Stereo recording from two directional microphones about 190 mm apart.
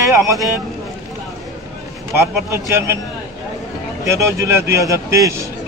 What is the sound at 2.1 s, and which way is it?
Speech, 15° right (ahead or behind).